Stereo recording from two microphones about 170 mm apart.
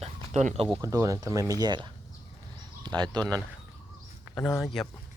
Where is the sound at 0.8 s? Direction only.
20° right (ahead or behind).